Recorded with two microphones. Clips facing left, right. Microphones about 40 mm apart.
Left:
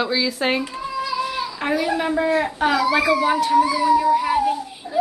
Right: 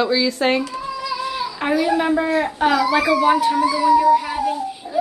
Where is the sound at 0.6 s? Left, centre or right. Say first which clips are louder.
Even; centre.